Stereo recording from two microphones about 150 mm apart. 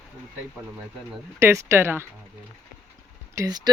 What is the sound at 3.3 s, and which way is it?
Speech, 25° right (ahead or behind).